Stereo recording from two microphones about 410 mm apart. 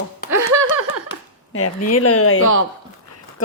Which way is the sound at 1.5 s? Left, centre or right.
Left.